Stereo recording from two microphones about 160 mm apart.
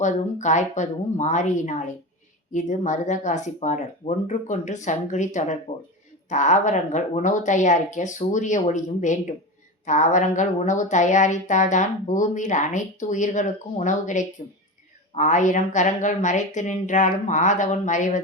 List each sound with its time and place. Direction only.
0.0 s a woman's voice: 50° left (ahead or behind)